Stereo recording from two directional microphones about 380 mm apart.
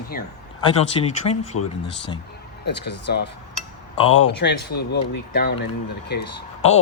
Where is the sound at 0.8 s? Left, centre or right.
Centre.